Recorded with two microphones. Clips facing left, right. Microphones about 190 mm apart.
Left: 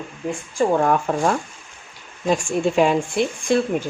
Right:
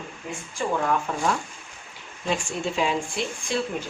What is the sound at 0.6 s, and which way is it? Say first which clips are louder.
Speech: left 7 dB; 45° left (ahead or behind).